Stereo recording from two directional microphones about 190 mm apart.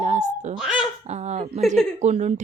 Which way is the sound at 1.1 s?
35° right (ahead or behind).